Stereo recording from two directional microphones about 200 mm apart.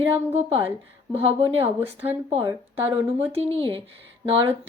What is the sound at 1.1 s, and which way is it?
Speech, 30° right (ahead or behind).